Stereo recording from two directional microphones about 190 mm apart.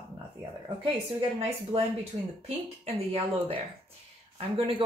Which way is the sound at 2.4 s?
30° right (ahead or behind).